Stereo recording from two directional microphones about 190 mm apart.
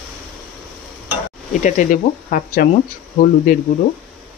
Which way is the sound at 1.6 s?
45° left (ahead or behind).